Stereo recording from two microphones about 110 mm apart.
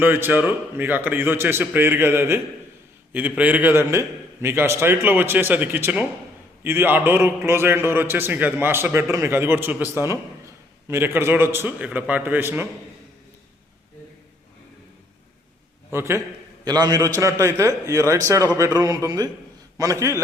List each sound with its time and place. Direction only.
0.0 s a man's voice: 20° right (ahead or behind)
15.9 s a man's voice: 25° right (ahead or behind)
16.6 s a man's voice: 35° right (ahead or behind)